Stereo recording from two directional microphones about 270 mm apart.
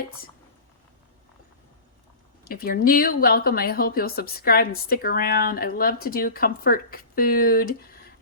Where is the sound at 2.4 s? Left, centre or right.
Left.